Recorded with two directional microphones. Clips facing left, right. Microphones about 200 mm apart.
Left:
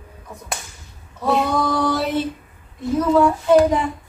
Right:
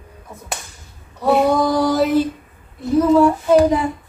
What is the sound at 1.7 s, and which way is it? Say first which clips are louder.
Music: right 5 dB; 40° right (ahead or behind).